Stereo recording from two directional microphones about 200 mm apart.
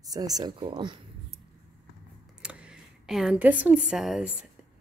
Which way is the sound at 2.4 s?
5° right (ahead or behind).